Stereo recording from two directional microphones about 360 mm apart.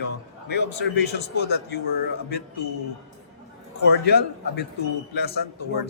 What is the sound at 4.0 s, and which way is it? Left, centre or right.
A man's voice, left.